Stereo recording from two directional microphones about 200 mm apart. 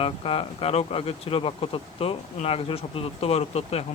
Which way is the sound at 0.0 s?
30° left (ahead or behind).